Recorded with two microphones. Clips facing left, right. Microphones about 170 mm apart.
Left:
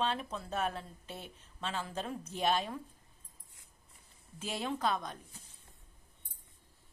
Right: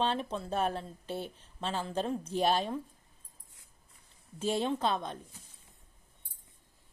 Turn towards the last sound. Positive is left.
turn(degrees=-25)  # may be behind; listen again after turning